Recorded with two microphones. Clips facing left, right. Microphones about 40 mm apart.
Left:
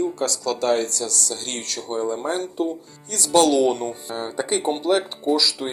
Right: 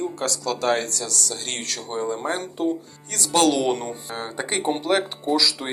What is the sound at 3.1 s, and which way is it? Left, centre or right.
Speech, right.